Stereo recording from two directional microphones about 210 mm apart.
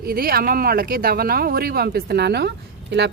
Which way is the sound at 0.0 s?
45° right (ahead or behind).